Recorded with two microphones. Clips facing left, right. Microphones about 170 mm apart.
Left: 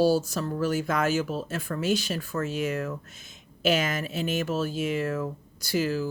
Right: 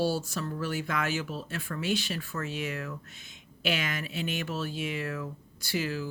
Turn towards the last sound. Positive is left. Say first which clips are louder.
# left 5 dB
turn(degrees=40)  # may be behind; listen again after turning